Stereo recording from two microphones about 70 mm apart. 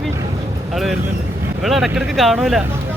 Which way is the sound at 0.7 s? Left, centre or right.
Centre.